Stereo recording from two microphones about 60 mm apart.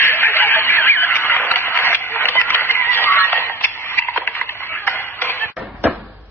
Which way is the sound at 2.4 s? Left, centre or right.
Left.